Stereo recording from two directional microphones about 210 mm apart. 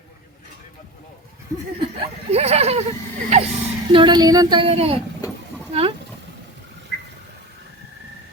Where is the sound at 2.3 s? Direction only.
30° right (ahead or behind).